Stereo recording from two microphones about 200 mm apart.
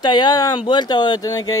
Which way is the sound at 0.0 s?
20° left (ahead or behind).